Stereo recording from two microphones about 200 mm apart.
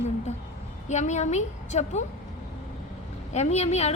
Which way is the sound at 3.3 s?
35° left (ahead or behind).